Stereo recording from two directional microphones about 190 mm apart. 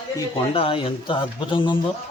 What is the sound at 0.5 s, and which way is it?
Speech, 30° left (ahead or behind).